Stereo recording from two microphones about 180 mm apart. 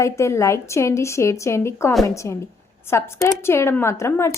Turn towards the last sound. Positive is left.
turn(degrees=15)  # may be behind; listen again after turning